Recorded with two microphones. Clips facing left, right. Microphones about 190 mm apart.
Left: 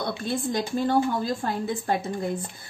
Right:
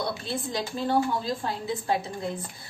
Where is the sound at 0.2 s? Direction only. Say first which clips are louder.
Left 4 dB; 50° left (ahead or behind).